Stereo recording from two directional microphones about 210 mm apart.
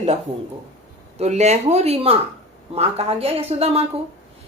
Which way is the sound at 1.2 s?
30° right (ahead or behind).